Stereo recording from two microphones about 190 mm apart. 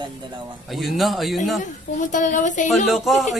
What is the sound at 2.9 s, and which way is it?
Speech, centre (ahead or behind).